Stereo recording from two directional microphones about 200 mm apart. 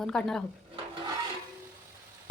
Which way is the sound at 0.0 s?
5° left (ahead or behind).